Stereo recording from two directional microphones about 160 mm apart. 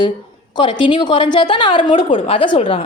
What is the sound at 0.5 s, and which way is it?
A woman's voice, 30° left (ahead or behind).